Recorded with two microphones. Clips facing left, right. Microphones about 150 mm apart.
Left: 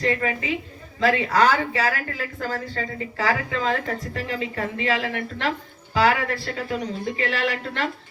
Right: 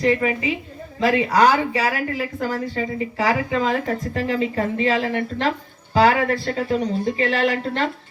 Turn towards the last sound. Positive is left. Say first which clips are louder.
# right 5 dB
turn(degrees=-30)  # may be behind; listen again after turning